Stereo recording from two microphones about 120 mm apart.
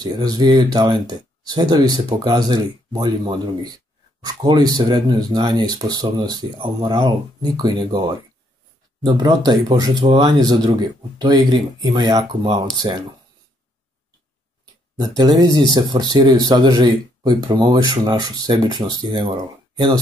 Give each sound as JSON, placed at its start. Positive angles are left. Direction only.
{"t": 0.0, "sound": "a man's voice", "side_deg": -35}
{"t": 9.0, "sound": "a man's voice", "side_deg": -35}
{"t": 15.0, "sound": "a man's voice", "side_deg": -35}